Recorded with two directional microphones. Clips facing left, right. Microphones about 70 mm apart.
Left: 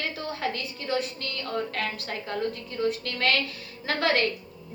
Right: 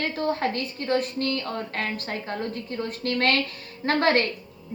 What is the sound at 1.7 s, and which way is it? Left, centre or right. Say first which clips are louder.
A woman's voice: right 2 dB; right.